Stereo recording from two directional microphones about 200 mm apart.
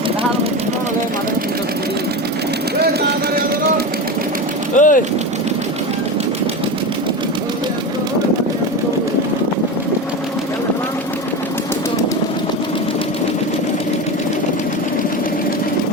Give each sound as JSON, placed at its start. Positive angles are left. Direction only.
{"t": 4.7, "sound": "vehicle", "side_deg": 40}